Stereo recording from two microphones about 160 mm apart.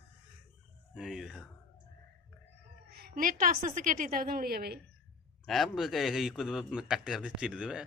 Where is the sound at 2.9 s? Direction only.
70° right (ahead or behind).